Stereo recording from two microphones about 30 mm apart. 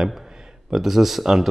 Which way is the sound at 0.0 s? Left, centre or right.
Centre.